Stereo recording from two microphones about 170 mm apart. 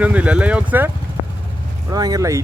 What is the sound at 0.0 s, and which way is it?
Speech, 10° right (ahead or behind).